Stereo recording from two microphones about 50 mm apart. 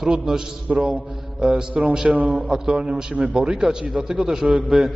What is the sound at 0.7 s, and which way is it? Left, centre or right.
A man's voice, right.